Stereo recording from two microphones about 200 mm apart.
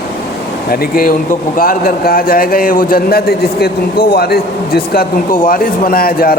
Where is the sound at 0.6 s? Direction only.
50° left (ahead or behind).